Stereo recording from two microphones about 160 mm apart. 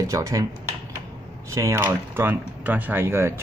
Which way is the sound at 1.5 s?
15° right (ahead or behind).